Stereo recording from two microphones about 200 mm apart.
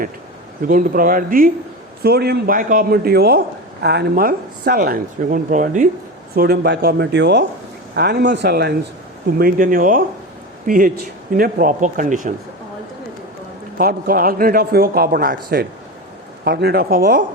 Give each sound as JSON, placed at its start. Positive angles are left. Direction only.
{"t": 0.7, "sound": "a man's voice", "side_deg": -45}
{"t": 6.3, "sound": "a man's voice", "side_deg": -50}
{"t": 13.7, "sound": "a man's voice", "side_deg": -45}